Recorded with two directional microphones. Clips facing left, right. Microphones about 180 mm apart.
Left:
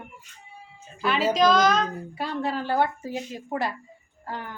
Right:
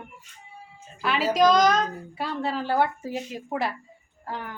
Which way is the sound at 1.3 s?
15° right (ahead or behind).